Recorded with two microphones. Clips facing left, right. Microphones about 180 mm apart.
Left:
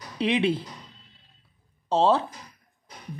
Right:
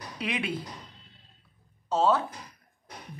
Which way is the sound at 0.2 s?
25° left (ahead or behind).